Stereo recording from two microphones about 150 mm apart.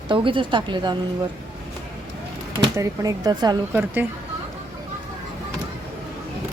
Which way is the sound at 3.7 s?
10° right (ahead or behind).